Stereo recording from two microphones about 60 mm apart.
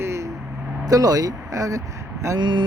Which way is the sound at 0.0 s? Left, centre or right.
Right.